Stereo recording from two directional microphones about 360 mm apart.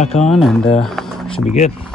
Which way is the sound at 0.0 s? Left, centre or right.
Centre.